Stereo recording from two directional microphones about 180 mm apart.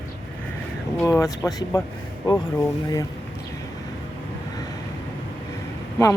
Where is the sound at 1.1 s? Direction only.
20° left (ahead or behind).